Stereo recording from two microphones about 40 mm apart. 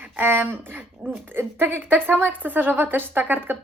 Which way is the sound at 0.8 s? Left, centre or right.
Right.